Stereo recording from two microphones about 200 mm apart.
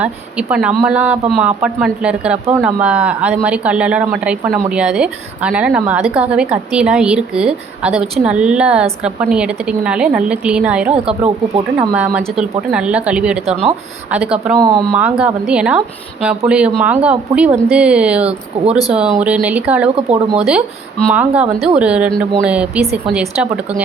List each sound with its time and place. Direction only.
0.0 s a man's voice: 5° right (ahead or behind)
11.2 s speech: 30° right (ahead or behind)
11.9 s a man's voice: 5° right (ahead or behind)
20.0 s speech: 30° right (ahead or behind)
21.1 s speech: 5° right (ahead or behind)
21.4 s speech: 30° right (ahead or behind)
21.8 s a man's voice: 5° right (ahead or behind)